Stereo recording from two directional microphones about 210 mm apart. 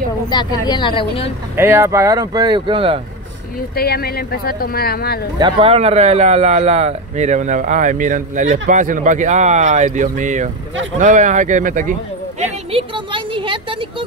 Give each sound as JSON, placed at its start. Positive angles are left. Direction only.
{"t": 0.3, "sound": "a woman's voice", "side_deg": 20}
{"t": 1.6, "sound": "speech", "side_deg": -10}
{"t": 3.7, "sound": "speech", "side_deg": 50}
{"t": 5.4, "sound": "speech", "side_deg": -25}
{"t": 12.4, "sound": "speech", "side_deg": -25}